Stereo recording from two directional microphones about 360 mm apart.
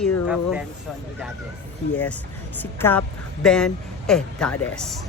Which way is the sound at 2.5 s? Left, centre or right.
Centre.